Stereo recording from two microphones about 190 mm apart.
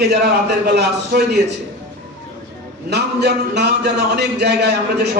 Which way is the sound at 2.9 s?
60° right (ahead or behind).